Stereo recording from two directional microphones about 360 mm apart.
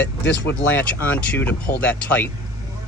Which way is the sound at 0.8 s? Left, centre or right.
Centre.